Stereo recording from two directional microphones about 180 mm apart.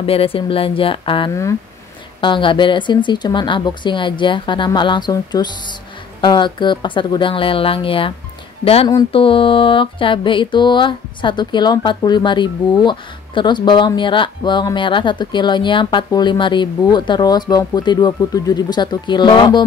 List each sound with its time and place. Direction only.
0.0 s speech: 30° left (ahead or behind)
2.1 s mantra: 25° left (ahead or behind)
8.6 s speech: 30° left (ahead or behind)
9.1 s mantra: 30° left (ahead or behind)